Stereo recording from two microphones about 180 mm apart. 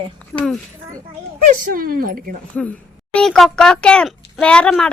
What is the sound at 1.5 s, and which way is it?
Speech, 50° right (ahead or behind).